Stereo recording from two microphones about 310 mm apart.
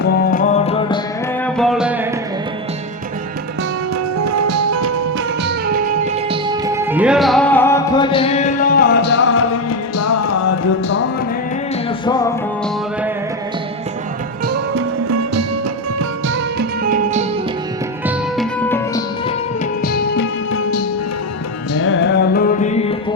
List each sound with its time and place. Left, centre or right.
0.0 s music: left
1.5 s music: centre
4.2 s music: right
5.4 s music: right; by 10.5 s left
11.9 s music: centre
15.0 s music: right
16.0 s music: right
18.0 s music: centre
19.8 s music: left
20.5 s music: left